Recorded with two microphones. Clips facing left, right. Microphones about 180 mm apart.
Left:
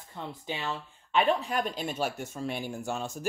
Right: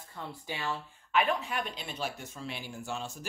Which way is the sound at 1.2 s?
40° left (ahead or behind).